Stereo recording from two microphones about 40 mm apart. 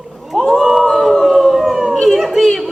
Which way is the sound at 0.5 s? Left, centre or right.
Centre.